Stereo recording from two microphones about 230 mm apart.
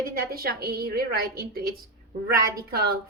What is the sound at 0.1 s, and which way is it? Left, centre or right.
A woman's voice, right.